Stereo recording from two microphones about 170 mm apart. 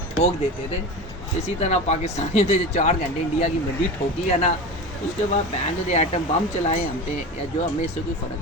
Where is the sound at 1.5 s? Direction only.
40° left (ahead or behind).